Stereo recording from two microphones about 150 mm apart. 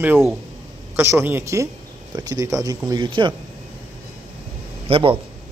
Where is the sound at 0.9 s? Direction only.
20° right (ahead or behind).